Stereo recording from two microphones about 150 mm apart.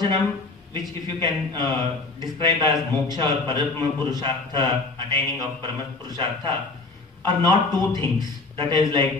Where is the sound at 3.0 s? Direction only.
30° right (ahead or behind).